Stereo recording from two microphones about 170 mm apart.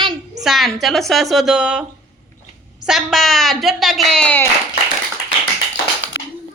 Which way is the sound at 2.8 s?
Centre (ahead or behind).